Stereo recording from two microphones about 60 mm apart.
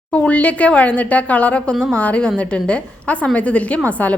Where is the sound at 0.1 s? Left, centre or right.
Left.